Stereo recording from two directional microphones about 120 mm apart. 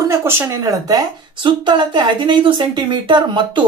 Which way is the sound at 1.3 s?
40° right (ahead or behind).